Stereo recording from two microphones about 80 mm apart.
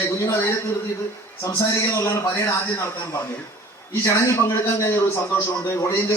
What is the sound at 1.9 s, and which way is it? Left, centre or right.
Speech, left.